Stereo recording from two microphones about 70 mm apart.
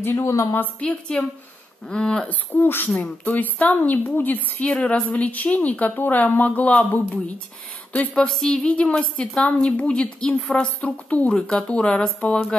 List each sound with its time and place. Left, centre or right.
0.1 s speech: left
0.7 s a woman's voice: centre
2.2 s a woman's voice: left
8.1 s a woman's voice: centre